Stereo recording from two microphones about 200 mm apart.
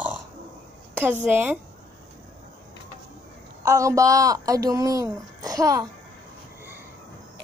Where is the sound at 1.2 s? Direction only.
10° right (ahead or behind).